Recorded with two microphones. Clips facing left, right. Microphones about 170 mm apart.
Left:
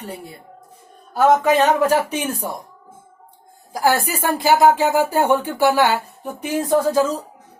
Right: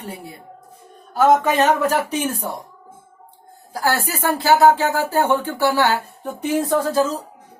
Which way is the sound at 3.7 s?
15° left (ahead or behind).